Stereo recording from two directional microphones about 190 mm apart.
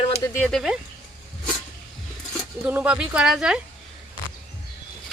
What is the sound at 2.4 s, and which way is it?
Speech, 5° right (ahead or behind).